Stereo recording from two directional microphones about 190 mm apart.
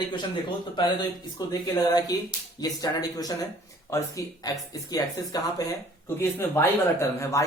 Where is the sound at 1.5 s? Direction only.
20° left (ahead or behind).